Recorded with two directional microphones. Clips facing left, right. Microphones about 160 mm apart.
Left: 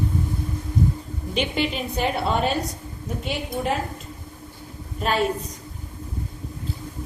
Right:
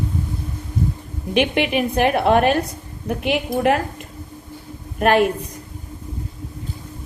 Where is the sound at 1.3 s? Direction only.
65° right (ahead or behind).